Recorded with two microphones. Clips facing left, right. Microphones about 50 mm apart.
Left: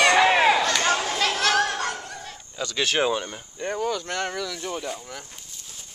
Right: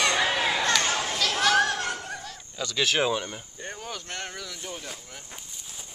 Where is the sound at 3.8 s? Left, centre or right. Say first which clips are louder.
Left 10 dB; left.